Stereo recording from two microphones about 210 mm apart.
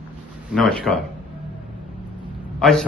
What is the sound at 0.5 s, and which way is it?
Speech, 5° left (ahead or behind).